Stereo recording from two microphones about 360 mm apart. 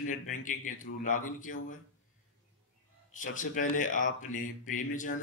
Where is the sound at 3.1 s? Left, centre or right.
Left.